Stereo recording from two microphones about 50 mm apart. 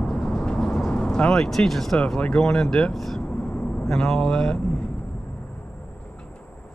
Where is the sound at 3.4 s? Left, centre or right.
Left.